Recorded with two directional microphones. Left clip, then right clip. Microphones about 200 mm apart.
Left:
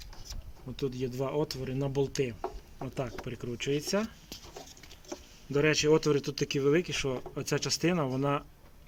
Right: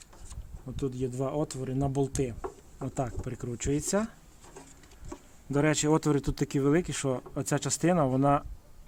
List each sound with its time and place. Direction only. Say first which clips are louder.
0.9 s speech: right 1 dB; 45° right (ahead or behind); by 4.1 s 65° right (ahead or behind)
5.5 s speech: left 1 dB; 65° right (ahead or behind)